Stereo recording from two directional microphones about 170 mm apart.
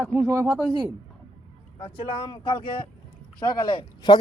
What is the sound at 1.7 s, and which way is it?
Speech, 30° left (ahead or behind).